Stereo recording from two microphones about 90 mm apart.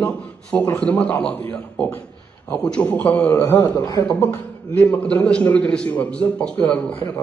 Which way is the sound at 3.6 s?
50° left (ahead or behind).